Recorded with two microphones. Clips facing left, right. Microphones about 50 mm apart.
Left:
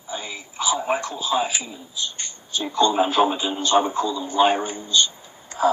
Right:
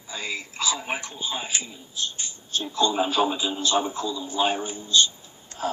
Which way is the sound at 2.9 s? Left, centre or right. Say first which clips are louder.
Left 4 dB; left.